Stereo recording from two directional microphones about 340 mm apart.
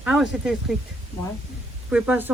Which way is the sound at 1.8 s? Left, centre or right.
Centre.